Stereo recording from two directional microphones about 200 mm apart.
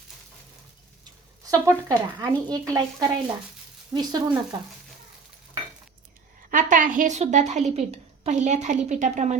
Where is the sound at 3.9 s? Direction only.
20° right (ahead or behind).